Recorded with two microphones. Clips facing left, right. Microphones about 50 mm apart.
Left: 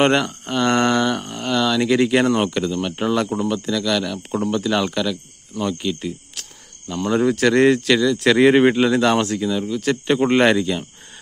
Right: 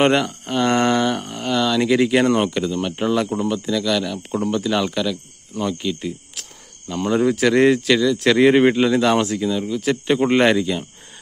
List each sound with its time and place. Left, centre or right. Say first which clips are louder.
0.0 s speech: even; centre